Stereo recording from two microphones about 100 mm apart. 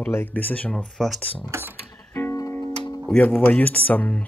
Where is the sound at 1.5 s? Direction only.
20° right (ahead or behind).